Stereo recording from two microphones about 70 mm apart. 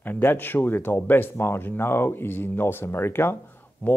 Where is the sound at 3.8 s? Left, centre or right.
Left.